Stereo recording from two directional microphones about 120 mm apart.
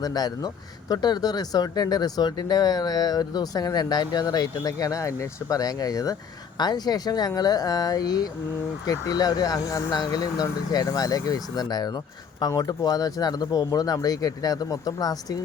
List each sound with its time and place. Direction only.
0.0 s speech: 35° left (ahead or behind)